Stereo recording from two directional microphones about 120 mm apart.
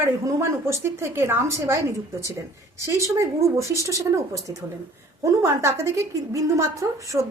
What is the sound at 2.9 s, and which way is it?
A woman's voice, 25° right (ahead or behind).